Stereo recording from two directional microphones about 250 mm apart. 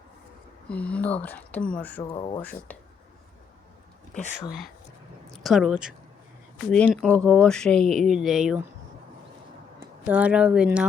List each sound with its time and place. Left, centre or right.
0.7 s speech: centre
2.1 s speech: centre
2.4 s speech: centre
4.1 s speech: left
5.3 s speech: centre
9.8 s speech: centre